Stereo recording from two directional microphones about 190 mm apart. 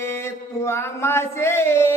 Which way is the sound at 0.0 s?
15° left (ahead or behind).